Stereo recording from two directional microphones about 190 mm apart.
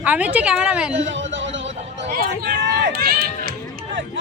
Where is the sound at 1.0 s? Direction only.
75° right (ahead or behind).